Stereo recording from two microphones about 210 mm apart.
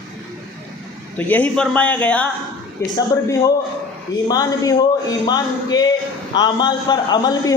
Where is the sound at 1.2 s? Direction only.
10° left (ahead or behind).